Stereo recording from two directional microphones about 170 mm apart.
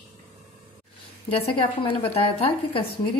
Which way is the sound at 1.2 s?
35° left (ahead or behind).